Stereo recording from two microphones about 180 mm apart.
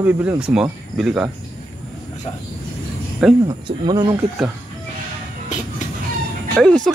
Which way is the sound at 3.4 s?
25° right (ahead or behind).